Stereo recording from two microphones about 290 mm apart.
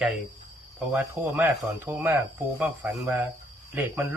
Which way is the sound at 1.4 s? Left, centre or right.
Centre.